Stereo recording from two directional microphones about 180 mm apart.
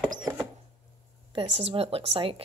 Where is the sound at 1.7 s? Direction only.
30° right (ahead or behind).